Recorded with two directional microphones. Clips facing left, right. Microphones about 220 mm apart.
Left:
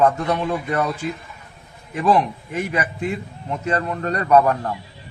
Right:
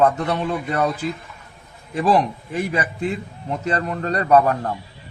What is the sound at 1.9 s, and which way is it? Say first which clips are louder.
A man's voice: even; 30° right (ahead or behind).